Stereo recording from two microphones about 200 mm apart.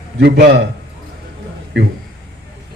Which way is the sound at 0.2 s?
60° right (ahead or behind).